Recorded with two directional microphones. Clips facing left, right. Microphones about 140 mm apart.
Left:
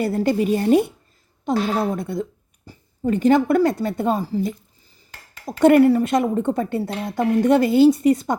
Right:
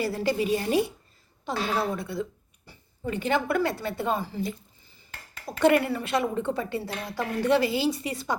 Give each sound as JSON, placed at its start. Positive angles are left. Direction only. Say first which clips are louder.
{"t": 0.0, "sound": "a woman's voice", "louder": "left 6 dB", "side_deg": 50}
{"t": 6.9, "sound": "speech", "louder": "left 8 dB", "side_deg": 25}
{"t": 7.4, "sound": "speech", "louder": "left 9 dB", "side_deg": 50}